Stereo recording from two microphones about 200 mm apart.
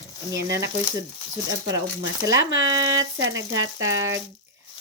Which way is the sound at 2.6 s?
15° right (ahead or behind).